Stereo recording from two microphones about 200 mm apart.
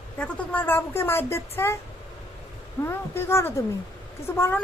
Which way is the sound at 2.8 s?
10° left (ahead or behind).